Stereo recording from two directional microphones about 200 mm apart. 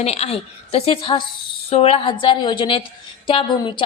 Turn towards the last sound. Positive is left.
turn(degrees=25)  # may be behind; listen again after turning